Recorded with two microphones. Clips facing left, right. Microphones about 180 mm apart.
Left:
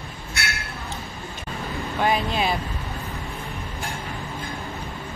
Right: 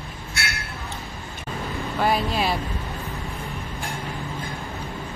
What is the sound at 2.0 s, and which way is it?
Speech, centre (ahead or behind).